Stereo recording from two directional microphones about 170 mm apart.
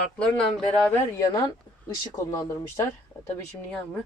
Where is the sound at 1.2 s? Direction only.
25° left (ahead or behind).